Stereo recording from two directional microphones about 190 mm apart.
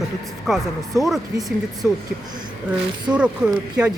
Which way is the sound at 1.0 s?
Centre (ahead or behind).